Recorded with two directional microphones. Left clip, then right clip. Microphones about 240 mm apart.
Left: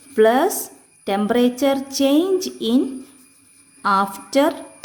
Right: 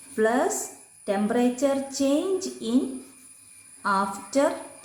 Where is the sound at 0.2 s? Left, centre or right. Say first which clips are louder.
Left 8 dB; left.